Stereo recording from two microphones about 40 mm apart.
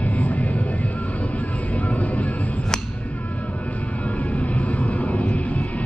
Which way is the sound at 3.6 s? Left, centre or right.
Left.